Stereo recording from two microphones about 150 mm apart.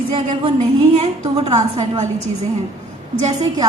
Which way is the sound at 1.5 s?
45° right (ahead or behind).